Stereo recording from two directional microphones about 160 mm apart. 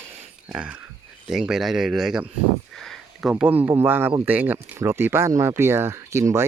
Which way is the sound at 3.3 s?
10° right (ahead or behind).